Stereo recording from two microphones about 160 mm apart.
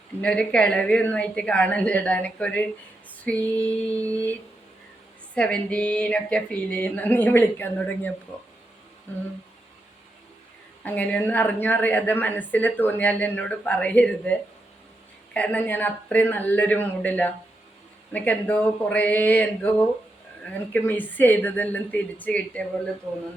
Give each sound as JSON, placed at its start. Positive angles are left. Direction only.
{"t": 0.2, "sound": "a woman's voice", "side_deg": 5}
{"t": 10.8, "sound": "a woman's voice", "side_deg": 10}